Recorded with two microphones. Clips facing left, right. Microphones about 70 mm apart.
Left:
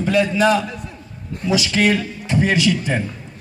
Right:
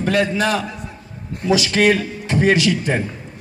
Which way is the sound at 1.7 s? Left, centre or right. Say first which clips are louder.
Right 2 dB; right.